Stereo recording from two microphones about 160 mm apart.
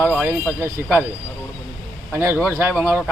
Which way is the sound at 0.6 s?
15° right (ahead or behind).